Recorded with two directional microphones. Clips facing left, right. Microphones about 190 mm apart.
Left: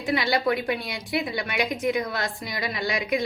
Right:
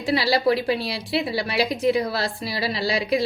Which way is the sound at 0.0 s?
30° right (ahead or behind).